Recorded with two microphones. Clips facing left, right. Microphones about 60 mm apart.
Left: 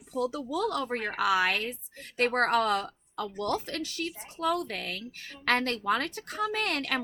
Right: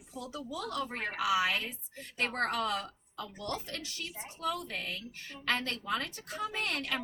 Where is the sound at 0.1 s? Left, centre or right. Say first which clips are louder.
Left 10 dB; left.